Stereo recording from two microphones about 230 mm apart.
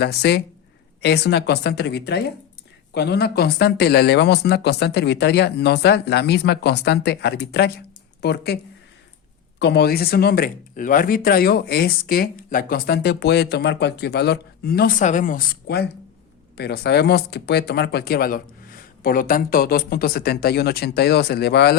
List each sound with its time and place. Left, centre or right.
0.0 s speech: left
9.6 s speech: left